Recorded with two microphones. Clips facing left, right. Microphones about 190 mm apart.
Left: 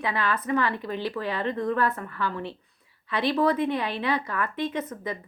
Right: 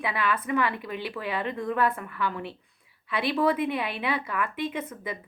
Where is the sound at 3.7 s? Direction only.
40° left (ahead or behind).